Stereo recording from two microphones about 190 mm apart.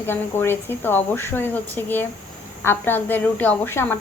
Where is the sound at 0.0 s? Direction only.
10° left (ahead or behind).